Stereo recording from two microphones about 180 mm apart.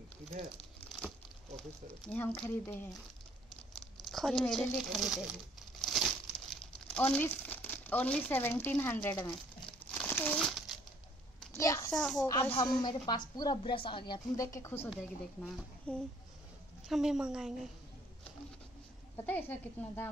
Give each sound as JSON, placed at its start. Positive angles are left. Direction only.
{"t": 1.6, "sound": "a woman's voice", "side_deg": 5}
{"t": 4.0, "sound": "speech", "side_deg": 0}
{"t": 5.8, "sound": "crumpling", "side_deg": 0}
{"t": 11.5, "sound": "a child's voice", "side_deg": 15}
{"t": 11.9, "sound": "speech", "side_deg": 5}
{"t": 12.4, "sound": "a woman's voice", "side_deg": 30}
{"t": 14.9, "sound": "speech", "side_deg": 0}
{"t": 19.2, "sound": "a woman's voice", "side_deg": 10}